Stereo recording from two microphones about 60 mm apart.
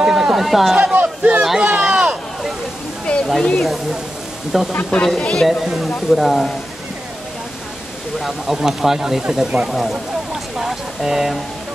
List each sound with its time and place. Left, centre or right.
0.0 s a sound: centre
0.9 s a sound: right
3.3 s speech: centre
5.0 s speech: centre
5.5 s speech: centre
8.2 s speech: centre